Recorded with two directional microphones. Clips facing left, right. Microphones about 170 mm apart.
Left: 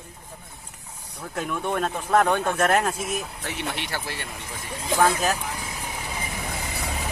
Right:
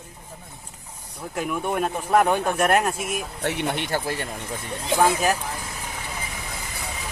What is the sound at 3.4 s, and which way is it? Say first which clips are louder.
Speech: right 6 dB; 60° right (ahead or behind).